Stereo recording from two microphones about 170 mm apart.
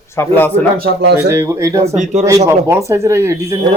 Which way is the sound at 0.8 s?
70° right (ahead or behind).